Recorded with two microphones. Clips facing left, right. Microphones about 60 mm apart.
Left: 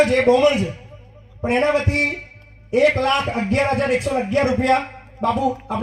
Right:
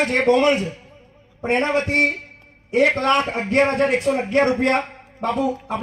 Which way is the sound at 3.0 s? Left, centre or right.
Right.